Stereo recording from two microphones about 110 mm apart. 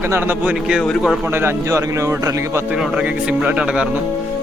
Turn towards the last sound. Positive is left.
turn(degrees=-10)  # may be behind; listen again after turning